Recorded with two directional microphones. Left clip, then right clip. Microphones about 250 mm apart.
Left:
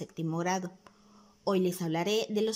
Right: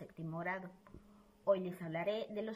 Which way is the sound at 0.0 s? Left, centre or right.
Left.